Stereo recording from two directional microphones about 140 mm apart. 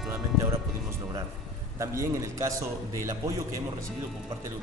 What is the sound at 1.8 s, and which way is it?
A man's voice, 20° right (ahead or behind).